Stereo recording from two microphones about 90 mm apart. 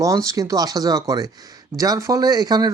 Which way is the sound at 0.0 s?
40° right (ahead or behind).